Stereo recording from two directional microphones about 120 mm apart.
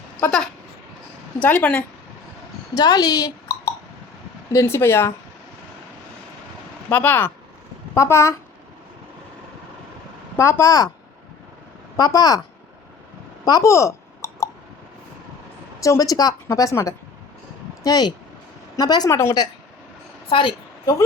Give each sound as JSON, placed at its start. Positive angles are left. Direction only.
{"t": 0.2, "sound": "speech", "side_deg": 15}
{"t": 1.4, "sound": "speech", "side_deg": 10}
{"t": 2.7, "sound": "a woman's voice", "side_deg": 35}
{"t": 6.9, "sound": "a woman's voice", "side_deg": 15}
{"t": 10.3, "sound": "a woman's voice", "side_deg": 20}
{"t": 11.9, "sound": "a woman's voice", "side_deg": 30}
{"t": 13.4, "sound": "clicking", "side_deg": 30}
{"t": 15.8, "sound": "a woman's voice", "side_deg": 30}
{"t": 20.3, "sound": "a woman's voice", "side_deg": 45}